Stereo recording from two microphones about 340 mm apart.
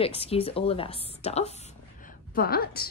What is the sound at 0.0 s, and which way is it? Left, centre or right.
A woman's voice, centre.